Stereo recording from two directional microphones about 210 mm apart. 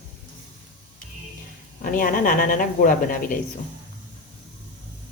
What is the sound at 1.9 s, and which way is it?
Speech, 40° left (ahead or behind).